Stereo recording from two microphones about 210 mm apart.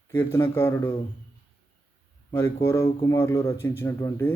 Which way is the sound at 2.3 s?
15° left (ahead or behind).